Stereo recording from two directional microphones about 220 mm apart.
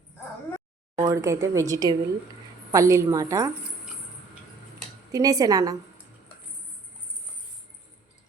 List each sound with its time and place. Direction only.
0.9 s speech: 15° right (ahead or behind)
5.1 s speech: 15° right (ahead or behind)